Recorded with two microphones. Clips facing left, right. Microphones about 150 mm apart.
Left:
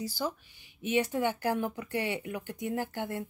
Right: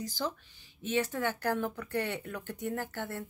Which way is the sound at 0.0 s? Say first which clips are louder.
Left 2 dB; 10° left (ahead or behind).